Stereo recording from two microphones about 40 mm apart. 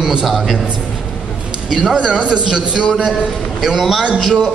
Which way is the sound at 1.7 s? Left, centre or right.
Centre.